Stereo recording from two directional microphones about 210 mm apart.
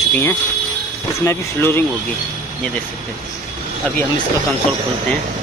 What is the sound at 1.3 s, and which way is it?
Speech, 10° left (ahead or behind).